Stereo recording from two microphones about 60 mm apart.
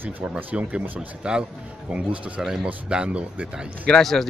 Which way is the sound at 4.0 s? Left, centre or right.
Centre.